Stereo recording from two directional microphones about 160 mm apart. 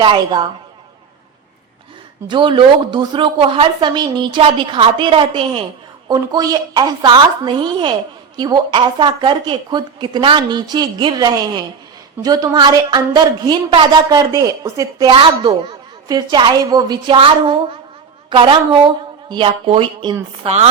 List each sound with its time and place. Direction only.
0.0 s a woman's voice: 30° right (ahead or behind)
2.2 s a woman's voice: 30° right (ahead or behind)